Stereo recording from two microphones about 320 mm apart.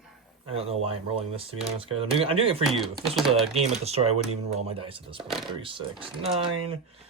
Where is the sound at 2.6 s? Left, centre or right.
Centre.